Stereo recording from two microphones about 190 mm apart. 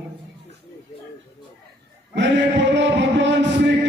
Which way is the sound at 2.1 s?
70° right (ahead or behind).